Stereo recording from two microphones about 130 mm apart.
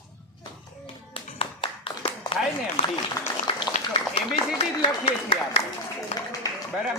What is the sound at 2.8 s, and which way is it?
Speech, 65° left (ahead or behind).